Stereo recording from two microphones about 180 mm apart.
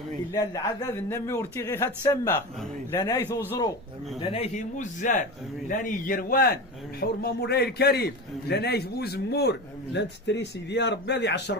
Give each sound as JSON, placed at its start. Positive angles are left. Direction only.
{"t": 0.3, "sound": "a man's voice", "side_deg": 20}
{"t": 4.2, "sound": "speech", "side_deg": 30}
{"t": 4.6, "sound": "a man's voice", "side_deg": 45}